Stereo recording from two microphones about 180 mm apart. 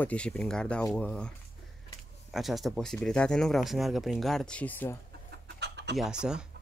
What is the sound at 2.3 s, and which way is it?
Speech, centre (ahead or behind).